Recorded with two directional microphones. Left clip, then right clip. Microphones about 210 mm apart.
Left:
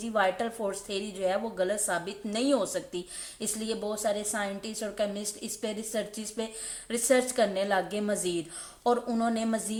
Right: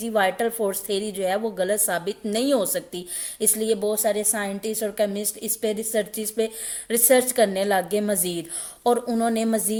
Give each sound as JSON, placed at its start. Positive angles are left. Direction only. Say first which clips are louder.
{"t": 0.0, "sound": "a woman's voice", "louder": "right 6 dB", "side_deg": -40}